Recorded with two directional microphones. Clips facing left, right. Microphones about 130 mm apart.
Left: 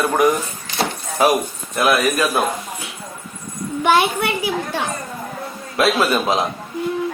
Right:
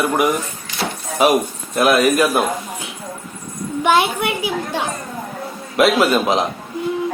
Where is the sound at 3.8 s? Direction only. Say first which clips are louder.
Even; 15° right (ahead or behind).